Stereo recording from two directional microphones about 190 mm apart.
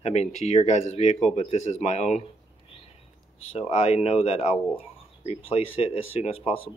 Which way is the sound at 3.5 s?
35° left (ahead or behind).